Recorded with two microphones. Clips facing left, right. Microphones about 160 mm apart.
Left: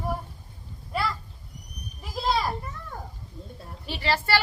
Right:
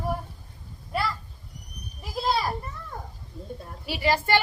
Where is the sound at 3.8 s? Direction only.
10° right (ahead or behind).